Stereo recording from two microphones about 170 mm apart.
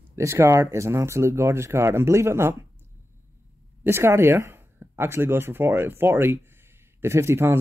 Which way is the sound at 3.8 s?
15° right (ahead or behind).